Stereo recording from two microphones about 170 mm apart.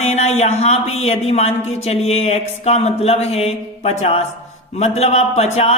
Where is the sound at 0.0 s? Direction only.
40° left (ahead or behind).